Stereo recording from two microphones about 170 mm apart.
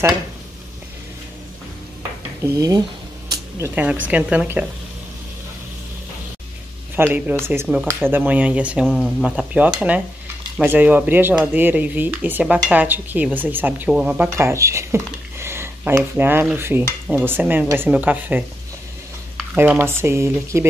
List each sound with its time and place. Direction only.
2.4 s speech: 20° right (ahead or behind)
7.0 s speech: 10° right (ahead or behind)
8.8 s stir: centre (ahead or behind)
10.6 s speech: 10° right (ahead or behind)
19.5 s speech: 10° right (ahead or behind)